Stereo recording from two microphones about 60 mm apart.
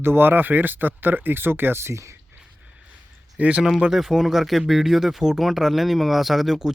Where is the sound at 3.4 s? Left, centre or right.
Right.